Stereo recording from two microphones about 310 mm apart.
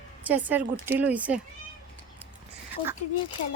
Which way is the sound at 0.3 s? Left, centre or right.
Centre.